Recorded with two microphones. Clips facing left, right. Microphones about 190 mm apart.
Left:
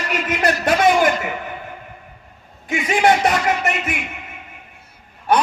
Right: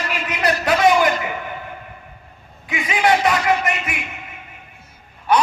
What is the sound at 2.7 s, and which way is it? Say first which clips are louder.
Speech: left 2 dB; 45° left (ahead or behind).